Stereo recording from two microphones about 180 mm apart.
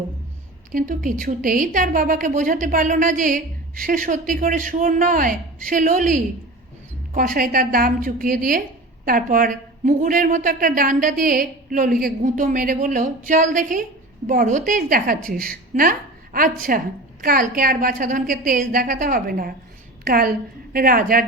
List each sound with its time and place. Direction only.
0.7 s a woman's voice: 50° right (ahead or behind)